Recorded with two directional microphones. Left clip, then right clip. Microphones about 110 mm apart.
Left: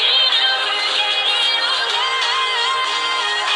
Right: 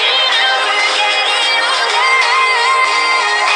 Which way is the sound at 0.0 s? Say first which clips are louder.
Right 3 dB; 40° right (ahead or behind).